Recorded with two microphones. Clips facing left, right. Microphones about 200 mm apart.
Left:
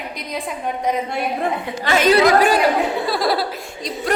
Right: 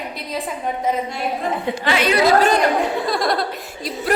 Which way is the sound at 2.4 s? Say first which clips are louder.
Left 1 dB; 10° left (ahead or behind).